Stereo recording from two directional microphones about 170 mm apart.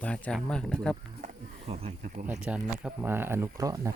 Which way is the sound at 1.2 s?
40° right (ahead or behind).